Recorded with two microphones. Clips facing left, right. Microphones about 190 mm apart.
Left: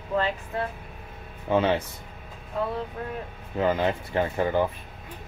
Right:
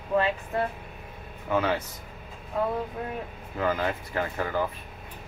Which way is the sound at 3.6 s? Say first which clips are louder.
Left 3 dB; 25° left (ahead or behind).